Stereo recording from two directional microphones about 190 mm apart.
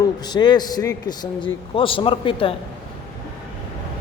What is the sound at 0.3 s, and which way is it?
A man's voice, 20° left (ahead or behind).